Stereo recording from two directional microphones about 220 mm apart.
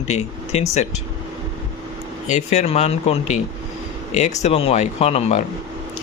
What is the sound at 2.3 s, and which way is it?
Speech, 30° left (ahead or behind).